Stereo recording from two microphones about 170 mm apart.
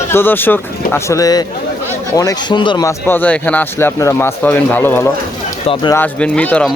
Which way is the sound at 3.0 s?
10° left (ahead or behind).